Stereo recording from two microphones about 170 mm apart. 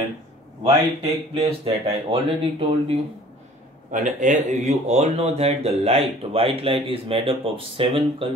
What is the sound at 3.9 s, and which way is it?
Speech, 45° right (ahead or behind).